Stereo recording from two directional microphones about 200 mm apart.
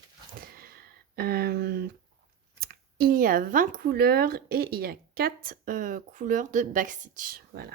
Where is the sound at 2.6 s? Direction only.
45° right (ahead or behind).